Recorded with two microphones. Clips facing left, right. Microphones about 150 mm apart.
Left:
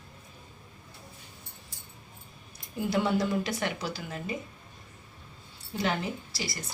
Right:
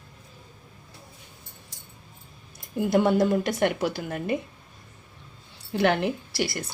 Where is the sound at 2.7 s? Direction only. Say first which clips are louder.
Right 6 dB; 50° right (ahead or behind).